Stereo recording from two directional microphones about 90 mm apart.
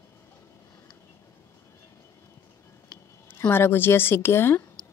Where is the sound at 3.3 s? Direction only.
25° left (ahead or behind).